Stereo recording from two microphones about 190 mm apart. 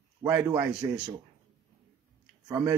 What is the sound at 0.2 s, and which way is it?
Speech, 15° right (ahead or behind).